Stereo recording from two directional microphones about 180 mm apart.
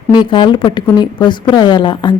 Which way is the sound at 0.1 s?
25° left (ahead or behind).